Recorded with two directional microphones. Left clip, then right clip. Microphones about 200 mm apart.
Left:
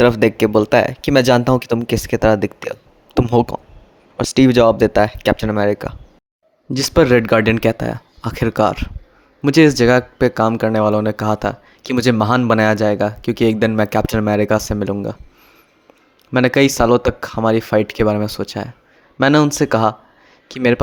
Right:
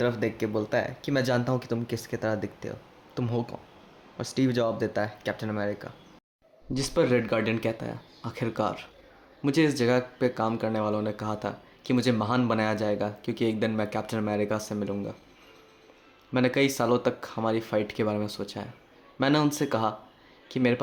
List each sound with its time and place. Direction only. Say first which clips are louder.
0.0 s speech: left 15 dB; 50° left (ahead or behind)
16.3 s speech: left 11 dB; 45° left (ahead or behind)